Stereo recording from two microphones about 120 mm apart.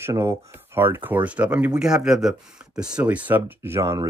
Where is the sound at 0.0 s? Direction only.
20° right (ahead or behind).